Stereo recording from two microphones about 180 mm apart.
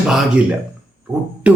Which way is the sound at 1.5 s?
5° right (ahead or behind).